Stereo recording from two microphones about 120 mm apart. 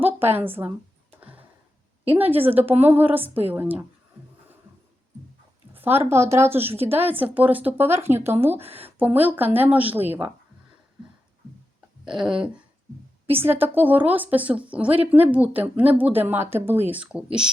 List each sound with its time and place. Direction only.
0.0 s a woman's voice: 15° right (ahead or behind)
1.2 s a sound: 15° right (ahead or behind)
2.1 s speech: 15° right (ahead or behind)
5.7 s a sound: 15° right (ahead or behind)
6.1 s speech: 25° right (ahead or behind)
13.3 s speech: 15° right (ahead or behind)